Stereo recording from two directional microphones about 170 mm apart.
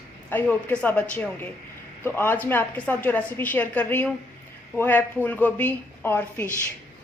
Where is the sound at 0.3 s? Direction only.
10° left (ahead or behind).